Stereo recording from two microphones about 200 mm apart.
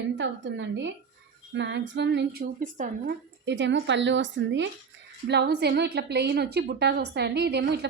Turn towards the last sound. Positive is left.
turn(degrees=-55)  # may be behind; listen again after turning